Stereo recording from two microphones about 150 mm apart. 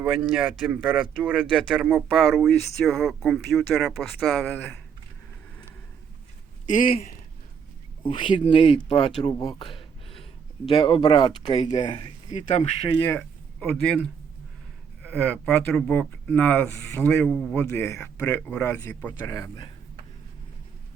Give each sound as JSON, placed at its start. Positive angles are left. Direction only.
{"t": 0.0, "sound": "speech", "side_deg": -10}
{"t": 4.4, "sound": "speech", "side_deg": 10}
{"t": 6.7, "sound": "speech", "side_deg": 60}
{"t": 8.0, "sound": "speech", "side_deg": 35}
{"t": 9.6, "sound": "a sound", "side_deg": 35}
{"t": 10.7, "sound": "speech", "side_deg": 35}
{"t": 12.3, "sound": "speech", "side_deg": 50}
{"t": 13.1, "sound": "speech", "side_deg": 15}
{"t": 17.2, "sound": "speech", "side_deg": 0}
{"t": 17.5, "sound": "speech", "side_deg": 15}